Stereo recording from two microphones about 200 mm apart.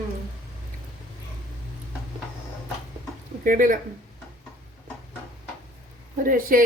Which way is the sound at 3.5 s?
40° right (ahead or behind).